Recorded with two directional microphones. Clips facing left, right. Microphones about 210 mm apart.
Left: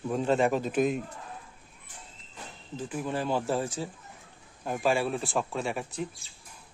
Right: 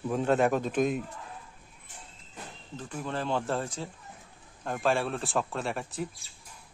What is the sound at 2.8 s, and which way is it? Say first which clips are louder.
Speech: left 2 dB; 10° left (ahead or behind).